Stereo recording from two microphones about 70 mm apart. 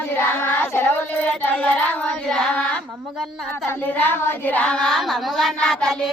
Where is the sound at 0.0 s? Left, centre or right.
Left; by 2.8 s centre.